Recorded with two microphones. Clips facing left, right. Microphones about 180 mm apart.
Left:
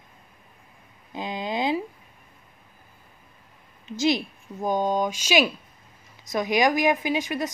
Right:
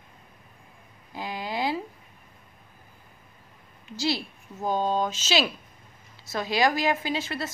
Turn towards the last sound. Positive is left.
turn(degrees=15)  # may be behind; listen again after turning